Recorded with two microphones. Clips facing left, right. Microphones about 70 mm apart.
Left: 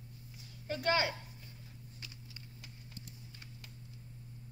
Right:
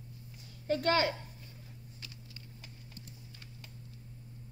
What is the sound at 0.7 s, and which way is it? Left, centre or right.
Speech, centre.